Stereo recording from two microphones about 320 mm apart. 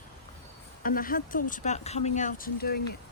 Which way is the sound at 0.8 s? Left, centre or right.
Left.